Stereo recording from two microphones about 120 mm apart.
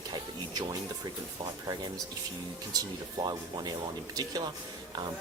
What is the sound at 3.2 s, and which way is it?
Speech, 35° right (ahead or behind).